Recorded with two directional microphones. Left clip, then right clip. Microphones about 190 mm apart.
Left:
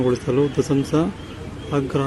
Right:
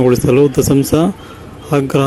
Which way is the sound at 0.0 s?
40° right (ahead or behind).